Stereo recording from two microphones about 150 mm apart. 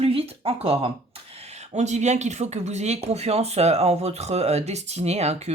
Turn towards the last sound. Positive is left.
turn(degrees=-45)  # may be behind; listen again after turning